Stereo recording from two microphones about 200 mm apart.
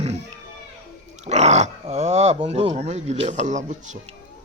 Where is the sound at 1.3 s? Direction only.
35° right (ahead or behind).